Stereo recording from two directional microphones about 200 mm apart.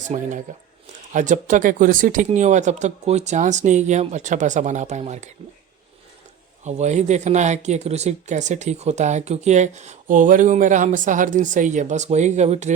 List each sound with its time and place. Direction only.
0.1 s speech: 35° right (ahead or behind)
6.7 s speech: 35° right (ahead or behind)